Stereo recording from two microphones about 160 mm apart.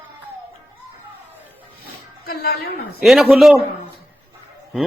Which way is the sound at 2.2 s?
70° left (ahead or behind).